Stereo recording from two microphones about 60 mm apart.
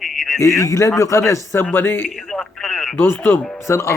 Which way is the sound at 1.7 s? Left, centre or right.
Left.